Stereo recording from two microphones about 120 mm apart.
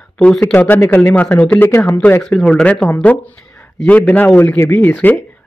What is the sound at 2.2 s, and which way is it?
Speech, 5° left (ahead or behind).